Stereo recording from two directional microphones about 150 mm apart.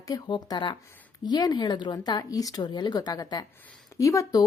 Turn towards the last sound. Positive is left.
turn(degrees=25)  # may be behind; listen again after turning